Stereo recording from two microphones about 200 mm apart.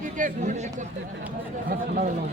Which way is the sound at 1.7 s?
45° right (ahead or behind).